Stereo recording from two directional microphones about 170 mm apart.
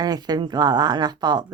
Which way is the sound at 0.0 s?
25° right (ahead or behind).